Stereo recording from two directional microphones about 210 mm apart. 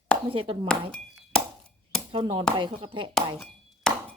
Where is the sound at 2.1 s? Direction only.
25° right (ahead or behind).